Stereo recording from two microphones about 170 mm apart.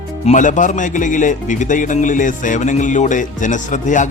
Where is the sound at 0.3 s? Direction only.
50° left (ahead or behind).